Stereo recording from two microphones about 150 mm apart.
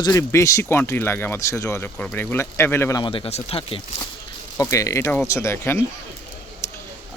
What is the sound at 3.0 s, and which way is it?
Speech, 35° left (ahead or behind).